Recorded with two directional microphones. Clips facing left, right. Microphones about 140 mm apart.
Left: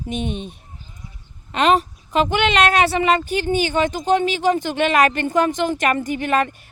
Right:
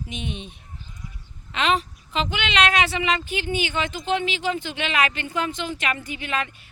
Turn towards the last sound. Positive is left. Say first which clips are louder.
# left 9 dB
turn(degrees=50)  # may be behind; listen again after turning